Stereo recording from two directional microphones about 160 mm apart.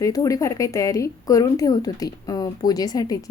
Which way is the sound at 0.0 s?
20° left (ahead or behind).